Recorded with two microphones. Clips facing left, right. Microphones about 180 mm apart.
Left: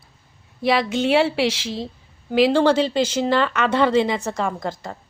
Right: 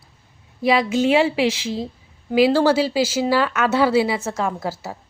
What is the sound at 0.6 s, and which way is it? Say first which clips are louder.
A woman's voice: right 2 dB; centre (ahead or behind).